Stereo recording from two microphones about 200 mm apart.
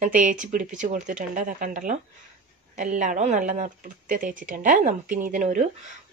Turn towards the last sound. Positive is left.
turn(degrees=-40)  # may be behind; listen again after turning